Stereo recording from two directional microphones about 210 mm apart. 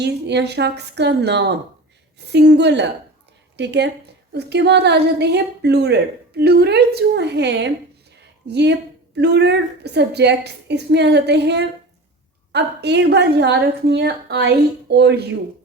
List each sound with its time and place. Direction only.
0.0 s a woman's voice: 55° right (ahead or behind)